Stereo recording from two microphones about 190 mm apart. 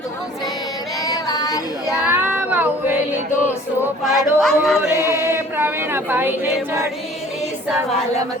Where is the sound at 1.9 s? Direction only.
10° right (ahead or behind).